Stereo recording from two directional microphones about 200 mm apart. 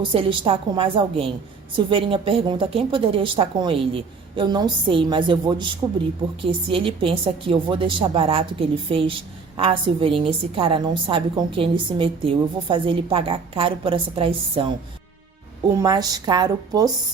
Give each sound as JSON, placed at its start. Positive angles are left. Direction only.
{"t": 0.0, "sound": "a woman's voice", "side_deg": -25}
{"t": 6.7, "sound": "a woman's voice", "side_deg": -25}
{"t": 15.7, "sound": "a woman's voice", "side_deg": -20}